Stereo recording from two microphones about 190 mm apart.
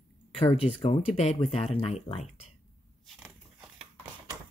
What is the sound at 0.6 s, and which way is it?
Speech, 35° left (ahead or behind).